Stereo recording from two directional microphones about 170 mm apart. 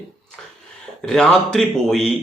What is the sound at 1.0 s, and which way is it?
Speech, 5° left (ahead or behind).